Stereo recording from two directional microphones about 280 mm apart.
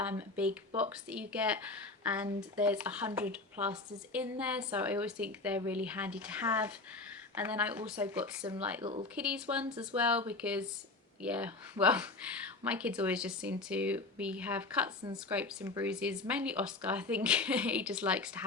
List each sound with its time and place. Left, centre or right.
0.0 s speech: centre
8.8 s speech: right
9.1 s speech: centre